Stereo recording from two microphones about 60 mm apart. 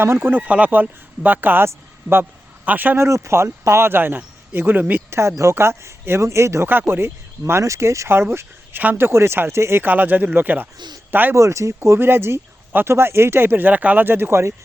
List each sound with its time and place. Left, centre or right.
0.0 s speech: right
0.4 s speech: right
2.6 s speech: right
3.0 s speech: right
5.4 s speech: right
6.7 s speech: right
7.6 s speech: right
9.8 s speech: right
11.3 s speech: right